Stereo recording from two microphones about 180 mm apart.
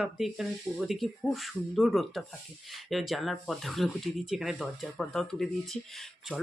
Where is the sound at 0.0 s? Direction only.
Centre (ahead or behind).